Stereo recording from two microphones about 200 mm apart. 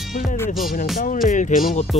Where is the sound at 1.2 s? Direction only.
40° left (ahead or behind).